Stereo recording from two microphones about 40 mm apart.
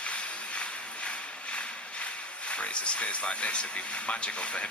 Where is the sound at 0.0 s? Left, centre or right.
Left.